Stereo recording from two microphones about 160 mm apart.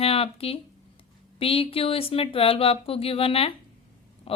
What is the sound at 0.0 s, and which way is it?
Speech, 35° left (ahead or behind).